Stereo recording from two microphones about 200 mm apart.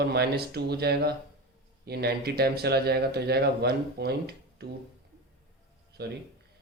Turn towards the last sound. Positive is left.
turn(degrees=-55)  # may be behind; listen again after turning